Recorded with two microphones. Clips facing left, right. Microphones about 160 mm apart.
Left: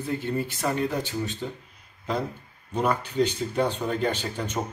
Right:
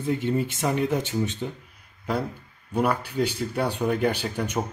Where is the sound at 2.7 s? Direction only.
10° right (ahead or behind).